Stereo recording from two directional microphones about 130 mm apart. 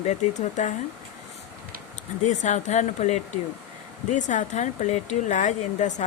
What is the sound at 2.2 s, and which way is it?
Speech, 70° left (ahead or behind).